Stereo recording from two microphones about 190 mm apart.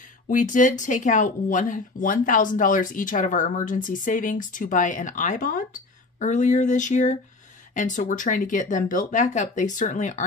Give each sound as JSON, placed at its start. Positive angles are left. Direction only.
{"t": 0.3, "sound": "speech", "side_deg": 40}